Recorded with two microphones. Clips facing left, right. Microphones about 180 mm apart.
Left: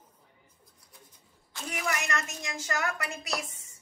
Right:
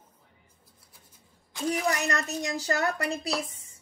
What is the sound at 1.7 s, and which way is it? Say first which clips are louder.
A woman's voice: right 5 dB; 35° right (ahead or behind).